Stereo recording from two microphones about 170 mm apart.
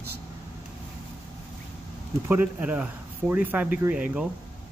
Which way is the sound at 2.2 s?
10° right (ahead or behind).